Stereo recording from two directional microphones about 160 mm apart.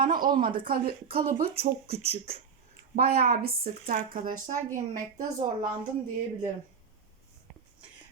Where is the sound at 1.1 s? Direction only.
70° right (ahead or behind).